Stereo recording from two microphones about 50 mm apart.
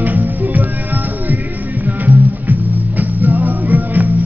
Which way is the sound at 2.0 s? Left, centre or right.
Right.